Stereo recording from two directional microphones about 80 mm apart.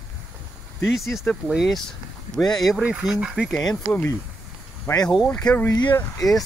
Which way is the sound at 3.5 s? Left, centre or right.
Centre.